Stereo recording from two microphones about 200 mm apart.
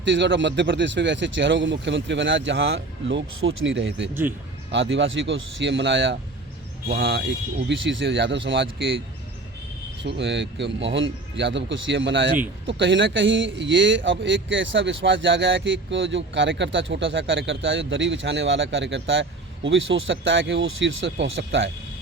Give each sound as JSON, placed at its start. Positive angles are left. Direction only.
{"t": 0.0, "sound": "speech", "side_deg": -60}
{"t": 4.1, "sound": "speech", "side_deg": -10}
{"t": 4.7, "sound": "speech", "side_deg": -65}
{"t": 10.0, "sound": "a man's voice", "side_deg": -60}